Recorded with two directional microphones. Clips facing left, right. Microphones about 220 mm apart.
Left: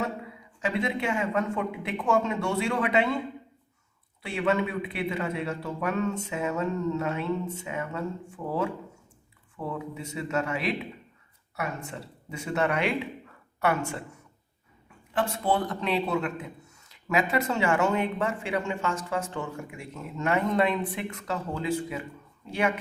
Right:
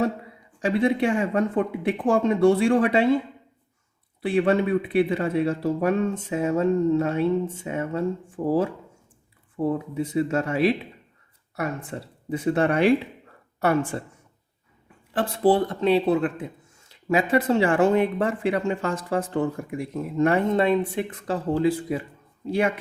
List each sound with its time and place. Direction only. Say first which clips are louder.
0.6 s speech: right 7 dB; 30° right (ahead or behind)
4.4 s speech: right 6 dB; 30° right (ahead or behind)
11.9 s speech: right 9 dB; 35° right (ahead or behind)
15.1 s speech: right 7 dB; 35° right (ahead or behind)